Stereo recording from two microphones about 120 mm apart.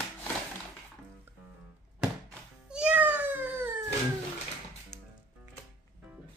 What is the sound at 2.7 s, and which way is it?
Cat, 10° right (ahead or behind).